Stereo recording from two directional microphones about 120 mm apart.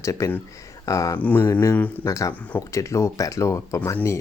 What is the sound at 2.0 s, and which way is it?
Speech, 30° left (ahead or behind).